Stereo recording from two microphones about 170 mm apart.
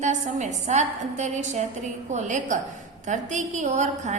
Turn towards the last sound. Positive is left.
turn(degrees=-45)  # may be behind; listen again after turning